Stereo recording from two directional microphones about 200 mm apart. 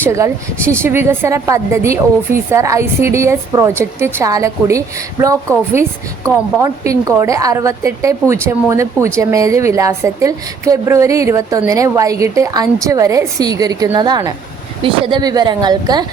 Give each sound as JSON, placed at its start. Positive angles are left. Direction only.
{"t": 0.0, "sound": "a woman's voice", "side_deg": -15}